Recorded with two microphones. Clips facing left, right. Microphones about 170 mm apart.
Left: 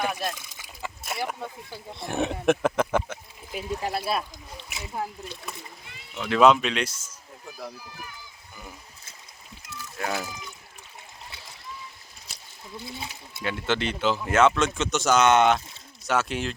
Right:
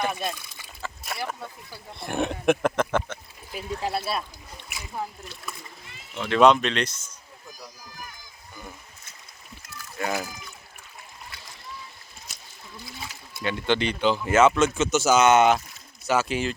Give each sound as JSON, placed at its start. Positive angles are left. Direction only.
{"t": 0.0, "sound": "speech", "side_deg": 5}
{"t": 1.1, "sound": "speech", "side_deg": 15}
{"t": 2.0, "sound": "speech", "side_deg": 0}
{"t": 6.1, "sound": "speech", "side_deg": 5}
{"t": 10.0, "sound": "speech", "side_deg": 0}
{"t": 12.8, "sound": "speech", "side_deg": 25}
{"t": 13.4, "sound": "speech", "side_deg": 5}